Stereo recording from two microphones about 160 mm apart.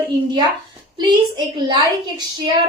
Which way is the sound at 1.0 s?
30° right (ahead or behind).